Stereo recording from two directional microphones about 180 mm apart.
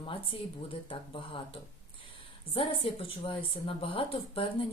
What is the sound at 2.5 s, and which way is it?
Speech, 30° left (ahead or behind).